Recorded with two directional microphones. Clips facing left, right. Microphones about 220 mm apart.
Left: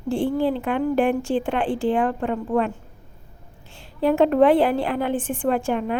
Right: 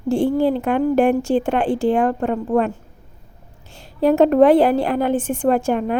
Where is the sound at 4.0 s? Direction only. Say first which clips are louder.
Right 4 dB; 40° right (ahead or behind).